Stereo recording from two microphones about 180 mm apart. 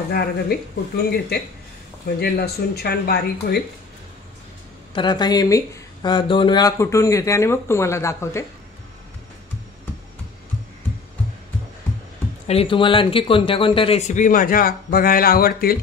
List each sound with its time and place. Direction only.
0.1 s speech: 60° left (ahead or behind)
4.9 s a woman's voice: 25° left (ahead or behind)
12.4 s a man's voice: 30° left (ahead or behind); by 15.8 s 55° left (ahead or behind)